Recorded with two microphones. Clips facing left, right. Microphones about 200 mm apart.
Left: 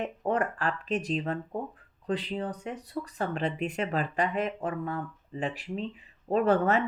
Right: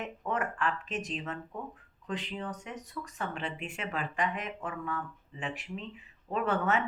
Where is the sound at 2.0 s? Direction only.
35° left (ahead or behind).